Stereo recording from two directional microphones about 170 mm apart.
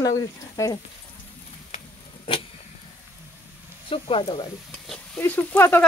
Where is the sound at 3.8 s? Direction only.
30° left (ahead or behind).